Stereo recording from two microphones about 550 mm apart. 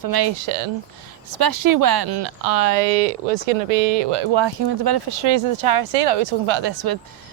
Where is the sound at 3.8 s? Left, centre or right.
Right.